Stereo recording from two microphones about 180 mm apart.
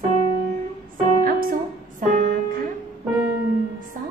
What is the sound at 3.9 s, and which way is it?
Music, 50° right (ahead or behind).